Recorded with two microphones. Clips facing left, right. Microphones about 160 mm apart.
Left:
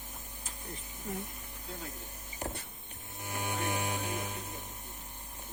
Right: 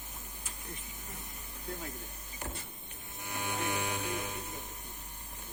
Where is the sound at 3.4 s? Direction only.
45° left (ahead or behind).